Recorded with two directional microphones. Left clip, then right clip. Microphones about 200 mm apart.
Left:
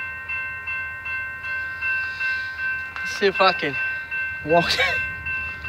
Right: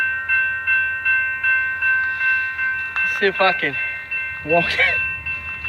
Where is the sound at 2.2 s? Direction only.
45° left (ahead or behind).